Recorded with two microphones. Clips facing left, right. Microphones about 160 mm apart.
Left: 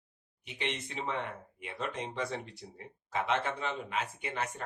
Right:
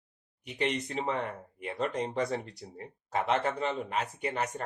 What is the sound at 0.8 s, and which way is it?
Speech, 40° right (ahead or behind).